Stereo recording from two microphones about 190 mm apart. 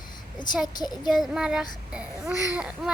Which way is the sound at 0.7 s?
20° left (ahead or behind).